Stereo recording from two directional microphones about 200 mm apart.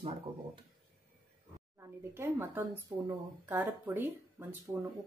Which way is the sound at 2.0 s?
10° right (ahead or behind).